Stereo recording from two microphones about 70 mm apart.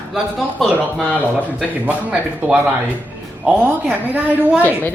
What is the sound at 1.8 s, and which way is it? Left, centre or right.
Speech, centre.